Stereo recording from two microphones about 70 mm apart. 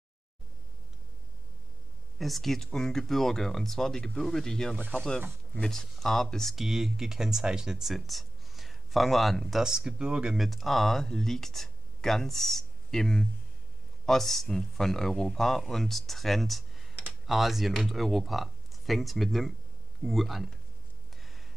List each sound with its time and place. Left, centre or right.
2.1 s speech: centre